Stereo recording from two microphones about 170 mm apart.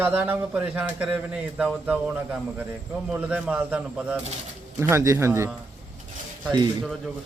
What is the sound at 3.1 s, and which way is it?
Speech, 10° right (ahead or behind).